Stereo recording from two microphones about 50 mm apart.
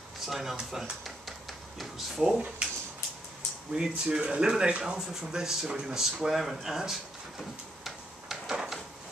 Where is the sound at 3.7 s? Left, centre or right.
Centre.